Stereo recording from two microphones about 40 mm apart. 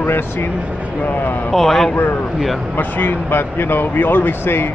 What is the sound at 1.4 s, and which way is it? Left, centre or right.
Speech, centre.